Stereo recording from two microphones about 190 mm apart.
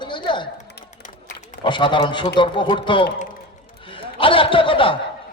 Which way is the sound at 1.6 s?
25° left (ahead or behind).